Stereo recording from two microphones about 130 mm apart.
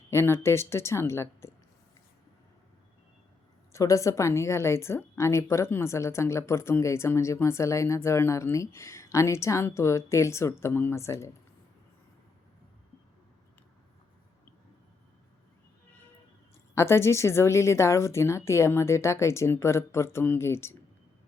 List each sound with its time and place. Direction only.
0.1 s speech: 20° left (ahead or behind)
3.7 s speech: 25° left (ahead or behind)
16.7 s speech: 20° left (ahead or behind)